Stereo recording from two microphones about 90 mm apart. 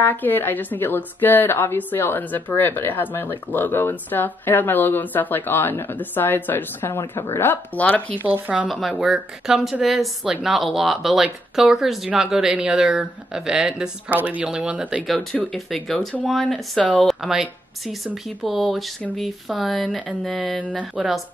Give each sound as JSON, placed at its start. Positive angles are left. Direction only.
{"t": 0.0, "sound": "a woman's voice", "side_deg": 20}
{"t": 8.2, "sound": "speech", "side_deg": -15}
{"t": 8.6, "sound": "speech", "side_deg": 0}
{"t": 15.5, "sound": "speech", "side_deg": 5}
{"t": 16.8, "sound": "speech", "side_deg": 15}
{"t": 17.1, "sound": "speech", "side_deg": -5}
{"t": 20.5, "sound": "speech", "side_deg": 15}